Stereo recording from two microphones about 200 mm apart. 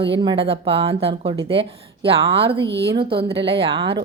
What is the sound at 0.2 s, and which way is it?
A woman's voice, 25° right (ahead or behind).